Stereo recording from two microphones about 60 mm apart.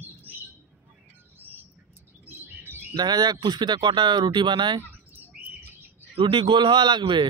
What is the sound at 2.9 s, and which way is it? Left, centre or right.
Speech, right.